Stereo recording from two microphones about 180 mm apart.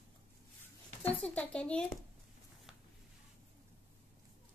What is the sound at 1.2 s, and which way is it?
Speech, 5° left (ahead or behind).